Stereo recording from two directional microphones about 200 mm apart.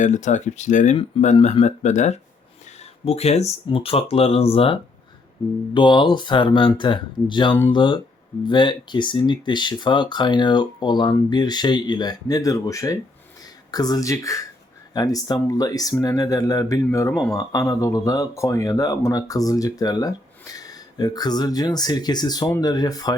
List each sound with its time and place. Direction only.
0.0 s speech: 35° left (ahead or behind); by 23.1 s 20° left (ahead or behind)